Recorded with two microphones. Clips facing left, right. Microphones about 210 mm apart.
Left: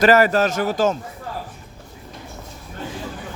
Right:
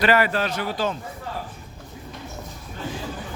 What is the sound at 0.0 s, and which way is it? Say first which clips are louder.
Speech: left 6 dB; 45° left (ahead or behind).